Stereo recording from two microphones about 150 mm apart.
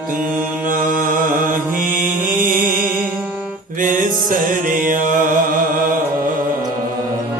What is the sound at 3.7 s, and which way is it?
Music, 65° right (ahead or behind).